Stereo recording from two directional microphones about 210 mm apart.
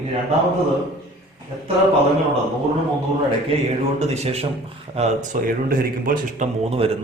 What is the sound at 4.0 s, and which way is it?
A man's voice, 30° right (ahead or behind).